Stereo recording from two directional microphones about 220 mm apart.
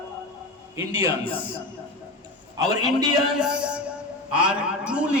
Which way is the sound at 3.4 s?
5° right (ahead or behind).